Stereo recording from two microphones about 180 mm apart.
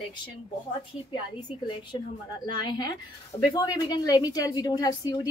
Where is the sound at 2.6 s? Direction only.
25° left (ahead or behind).